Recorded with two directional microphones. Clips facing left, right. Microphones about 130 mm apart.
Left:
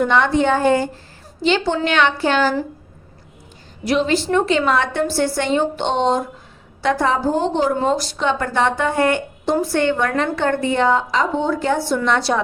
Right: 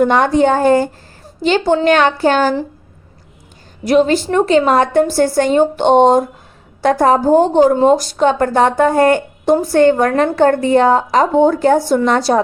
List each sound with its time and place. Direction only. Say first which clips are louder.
0.0 s a woman's voice: right 5 dB; 45° right (ahead or behind)
3.8 s a woman's voice: right 6 dB; 45° right (ahead or behind)